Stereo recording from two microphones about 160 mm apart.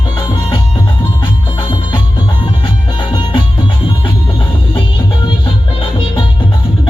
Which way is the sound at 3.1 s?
30° left (ahead or behind).